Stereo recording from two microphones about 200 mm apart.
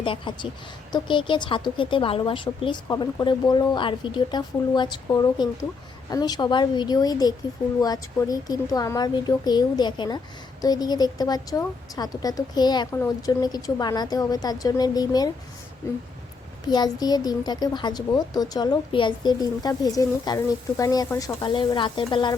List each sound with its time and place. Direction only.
0.0 s a woman's voice: 25° left (ahead or behind)
16.6 s a woman's voice: 20° left (ahead or behind)